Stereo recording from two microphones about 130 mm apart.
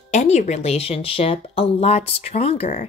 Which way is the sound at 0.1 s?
65° left (ahead or behind).